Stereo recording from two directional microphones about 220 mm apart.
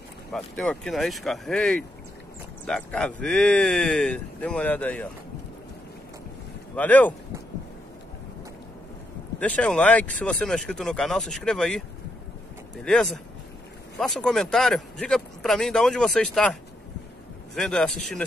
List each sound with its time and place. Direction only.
0.3 s speech: centre (ahead or behind)
6.7 s speech: 5° left (ahead or behind)
9.4 s speech: 5° left (ahead or behind)
17.6 s speech: 5° left (ahead or behind)